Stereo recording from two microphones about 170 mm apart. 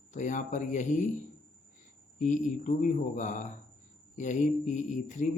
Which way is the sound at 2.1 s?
50° left (ahead or behind).